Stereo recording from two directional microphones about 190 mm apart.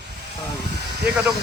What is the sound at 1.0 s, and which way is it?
Speech, 10° right (ahead or behind).